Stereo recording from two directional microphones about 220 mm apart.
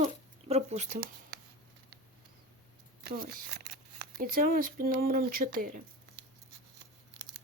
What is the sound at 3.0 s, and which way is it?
Speech, 45° right (ahead or behind).